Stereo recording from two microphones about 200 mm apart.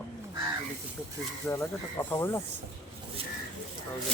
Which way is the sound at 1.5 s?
15° left (ahead or behind).